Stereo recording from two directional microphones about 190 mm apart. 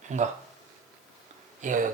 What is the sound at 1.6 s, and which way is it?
Speech, 40° right (ahead or behind).